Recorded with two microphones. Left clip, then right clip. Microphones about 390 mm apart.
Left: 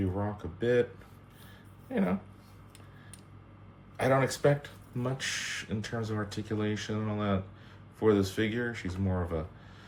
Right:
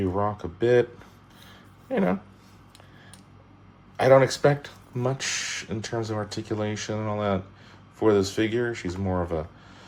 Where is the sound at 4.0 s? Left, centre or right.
Right.